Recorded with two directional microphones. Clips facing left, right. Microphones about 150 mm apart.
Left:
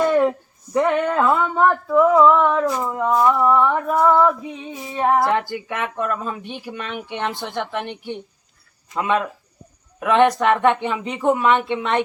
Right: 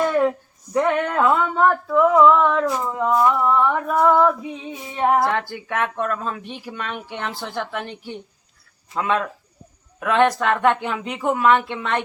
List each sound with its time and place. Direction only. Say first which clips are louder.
0.2 s speech: left 1 dB; 5° left (ahead or behind)
9.0 s speech: left 1 dB; 5° left (ahead or behind)
10.0 s speech: left 2 dB; 15° left (ahead or behind)
10.8 s speech: left 2 dB; centre (ahead or behind)